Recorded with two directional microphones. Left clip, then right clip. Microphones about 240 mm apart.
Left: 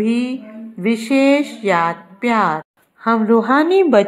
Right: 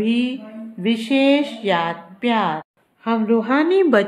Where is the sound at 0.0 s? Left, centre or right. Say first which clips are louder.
Left 2 dB; centre.